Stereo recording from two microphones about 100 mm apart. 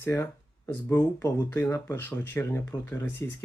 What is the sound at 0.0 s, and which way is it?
Speech, 25° left (ahead or behind).